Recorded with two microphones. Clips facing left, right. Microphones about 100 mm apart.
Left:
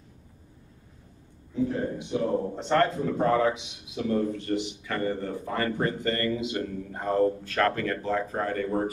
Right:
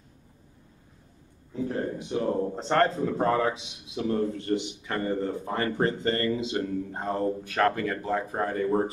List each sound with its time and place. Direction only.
2.0 s a man's voice: 40° right (ahead or behind)